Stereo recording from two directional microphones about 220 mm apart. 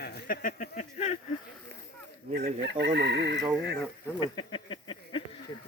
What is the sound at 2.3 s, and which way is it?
Speech, 50° right (ahead or behind).